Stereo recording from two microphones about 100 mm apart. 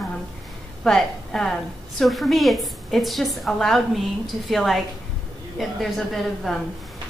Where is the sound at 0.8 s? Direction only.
5° left (ahead or behind).